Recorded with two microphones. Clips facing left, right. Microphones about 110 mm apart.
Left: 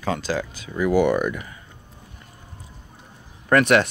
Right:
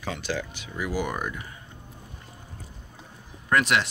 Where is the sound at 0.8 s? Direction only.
60° left (ahead or behind).